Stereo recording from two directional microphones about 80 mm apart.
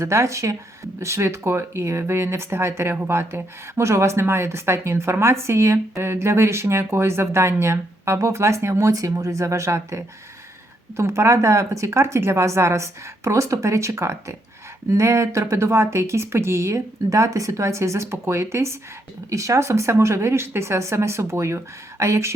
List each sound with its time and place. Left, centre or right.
0.0 s a woman's voice: right